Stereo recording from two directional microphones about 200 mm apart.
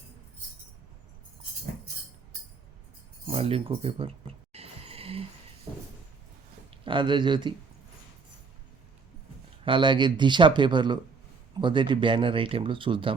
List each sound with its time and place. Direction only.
3.2 s a sound: 30° right (ahead or behind)
6.7 s speech: 25° right (ahead or behind)
9.6 s speech: 25° right (ahead or behind)